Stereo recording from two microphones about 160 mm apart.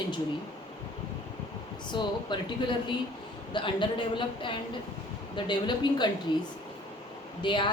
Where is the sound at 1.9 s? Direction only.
30° left (ahead or behind).